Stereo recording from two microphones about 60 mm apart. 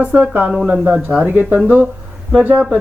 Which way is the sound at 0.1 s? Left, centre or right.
Right.